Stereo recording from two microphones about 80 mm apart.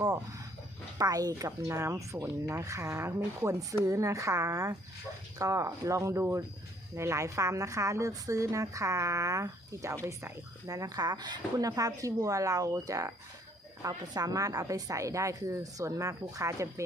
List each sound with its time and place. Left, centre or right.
0.9 s a woman's voice: right
1.5 s a woman's voice: right